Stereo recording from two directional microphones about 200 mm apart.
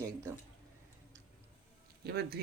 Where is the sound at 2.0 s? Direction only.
55° right (ahead or behind).